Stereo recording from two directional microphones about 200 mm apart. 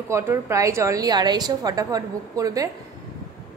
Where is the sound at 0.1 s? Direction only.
15° right (ahead or behind).